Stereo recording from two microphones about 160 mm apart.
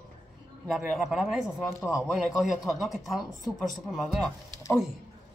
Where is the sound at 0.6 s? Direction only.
Centre (ahead or behind).